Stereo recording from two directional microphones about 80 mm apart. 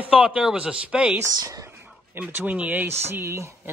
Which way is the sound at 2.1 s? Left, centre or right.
Right.